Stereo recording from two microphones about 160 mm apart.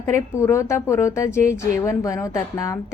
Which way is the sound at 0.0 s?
15° left (ahead or behind).